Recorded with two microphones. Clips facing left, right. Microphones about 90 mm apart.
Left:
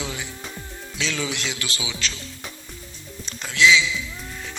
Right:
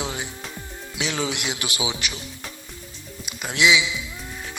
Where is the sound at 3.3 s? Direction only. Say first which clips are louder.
Left 2 dB; 15° right (ahead or behind).